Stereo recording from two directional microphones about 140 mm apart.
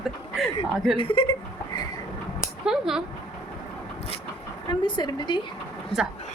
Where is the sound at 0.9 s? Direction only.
40° left (ahead or behind).